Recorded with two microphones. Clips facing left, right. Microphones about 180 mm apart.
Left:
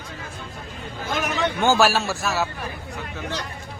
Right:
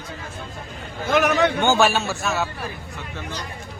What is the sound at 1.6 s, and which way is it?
Speech, centre (ahead or behind).